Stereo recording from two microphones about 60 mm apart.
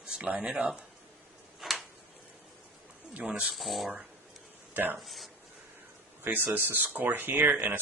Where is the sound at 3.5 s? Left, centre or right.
Centre.